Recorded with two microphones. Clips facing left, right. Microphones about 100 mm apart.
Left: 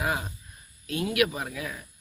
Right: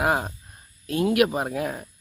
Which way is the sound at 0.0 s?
45° right (ahead or behind).